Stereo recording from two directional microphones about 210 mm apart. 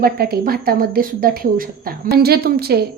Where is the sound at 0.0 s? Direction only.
45° right (ahead or behind).